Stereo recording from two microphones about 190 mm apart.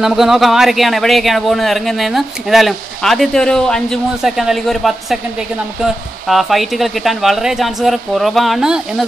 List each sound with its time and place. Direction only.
0.0 s speech: centre (ahead or behind)
6.2 s speech: centre (ahead or behind)